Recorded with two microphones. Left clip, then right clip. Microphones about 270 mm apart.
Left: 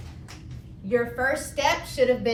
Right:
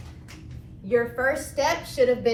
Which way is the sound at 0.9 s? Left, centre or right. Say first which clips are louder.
Right 1 dB; centre.